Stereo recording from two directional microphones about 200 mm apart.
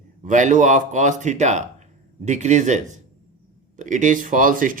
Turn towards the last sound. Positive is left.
turn(degrees=-40)  # may be behind; listen again after turning